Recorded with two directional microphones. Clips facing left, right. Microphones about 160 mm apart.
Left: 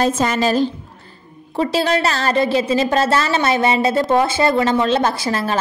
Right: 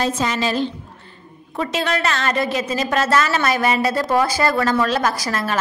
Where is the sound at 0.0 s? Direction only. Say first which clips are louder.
Left 4 dB; 45° left (ahead or behind).